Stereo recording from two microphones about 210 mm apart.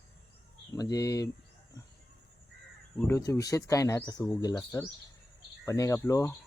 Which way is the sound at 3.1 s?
15° left (ahead or behind).